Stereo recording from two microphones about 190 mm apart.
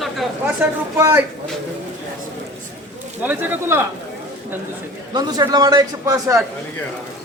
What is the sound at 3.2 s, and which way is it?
Speech, 10° right (ahead or behind).